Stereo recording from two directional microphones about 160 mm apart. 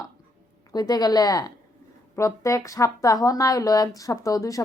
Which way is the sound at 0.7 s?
25° left (ahead or behind).